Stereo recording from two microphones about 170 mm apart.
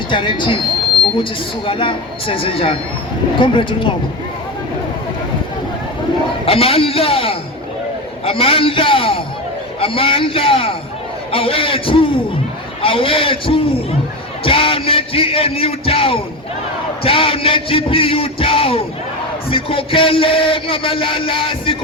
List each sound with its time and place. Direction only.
0.1 s speech: 30° left (ahead or behind)
1.1 s music: 30° left (ahead or behind)
3.4 s speech: 30° left (ahead or behind)
6.4 s music: 35° left (ahead or behind)